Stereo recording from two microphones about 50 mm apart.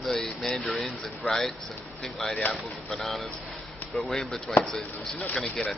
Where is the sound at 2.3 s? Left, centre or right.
Left.